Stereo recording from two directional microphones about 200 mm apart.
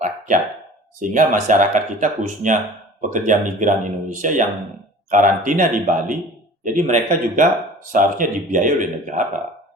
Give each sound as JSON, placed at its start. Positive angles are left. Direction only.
{"t": 1.1, "sound": "speech", "side_deg": -40}